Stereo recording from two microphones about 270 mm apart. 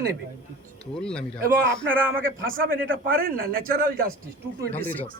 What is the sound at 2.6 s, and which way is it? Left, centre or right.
A man's voice, right.